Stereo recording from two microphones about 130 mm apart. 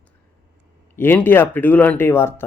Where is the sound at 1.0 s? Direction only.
15° left (ahead or behind).